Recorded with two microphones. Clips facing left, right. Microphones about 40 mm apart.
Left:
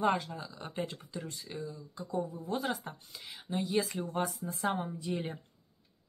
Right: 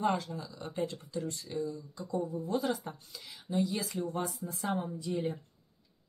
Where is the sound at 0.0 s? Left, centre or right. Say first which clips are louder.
Left 1 dB; left.